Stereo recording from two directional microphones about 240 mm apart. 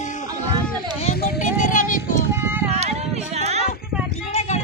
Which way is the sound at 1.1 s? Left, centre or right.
Left.